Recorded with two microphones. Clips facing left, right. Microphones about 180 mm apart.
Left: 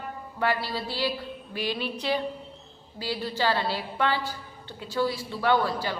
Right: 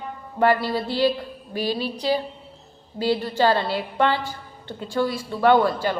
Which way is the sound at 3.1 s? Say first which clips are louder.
Right 7 dB; 50° right (ahead or behind).